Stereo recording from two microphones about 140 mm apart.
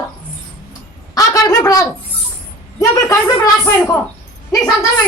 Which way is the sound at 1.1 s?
25° left (ahead or behind).